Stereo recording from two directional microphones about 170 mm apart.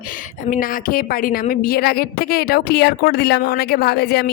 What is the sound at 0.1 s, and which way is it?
A woman's voice, 50° left (ahead or behind).